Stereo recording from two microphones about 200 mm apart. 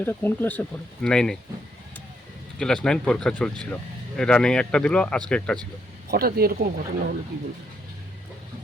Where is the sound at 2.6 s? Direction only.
5° left (ahead or behind).